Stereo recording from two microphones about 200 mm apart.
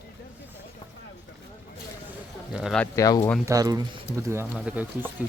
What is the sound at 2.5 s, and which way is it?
Speech, centre (ahead or behind).